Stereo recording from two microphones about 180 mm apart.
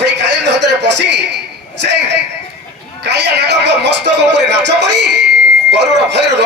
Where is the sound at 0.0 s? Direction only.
75° right (ahead or behind).